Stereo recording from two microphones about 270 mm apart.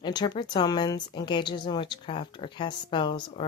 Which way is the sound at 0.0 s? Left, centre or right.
Centre.